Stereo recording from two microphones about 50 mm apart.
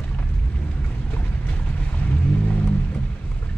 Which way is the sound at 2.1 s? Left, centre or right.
Left.